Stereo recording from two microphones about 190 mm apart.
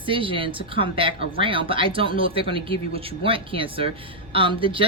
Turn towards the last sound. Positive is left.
turn(degrees=-25)  # may be behind; listen again after turning